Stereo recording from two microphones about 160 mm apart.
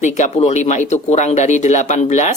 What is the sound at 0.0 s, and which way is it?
Speech, 45° left (ahead or behind).